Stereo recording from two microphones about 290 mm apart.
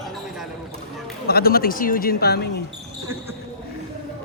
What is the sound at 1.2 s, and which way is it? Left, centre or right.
Speech, left.